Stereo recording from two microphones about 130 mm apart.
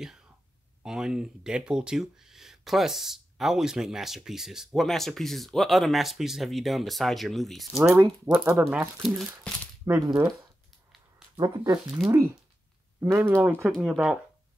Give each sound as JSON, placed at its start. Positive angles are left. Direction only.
{"t": 0.8, "sound": "speech", "side_deg": -5}
{"t": 7.9, "sound": "speech", "side_deg": -15}
{"t": 8.6, "sound": "speech", "side_deg": -5}
{"t": 9.9, "sound": "speech", "side_deg": -25}
{"t": 11.3, "sound": "speech", "side_deg": -30}
{"t": 13.1, "sound": "speech", "side_deg": -15}
{"t": 13.7, "sound": "speech", "side_deg": -5}